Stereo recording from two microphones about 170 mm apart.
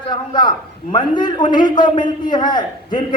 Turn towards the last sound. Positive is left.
turn(degrees=25)  # may be behind; listen again after turning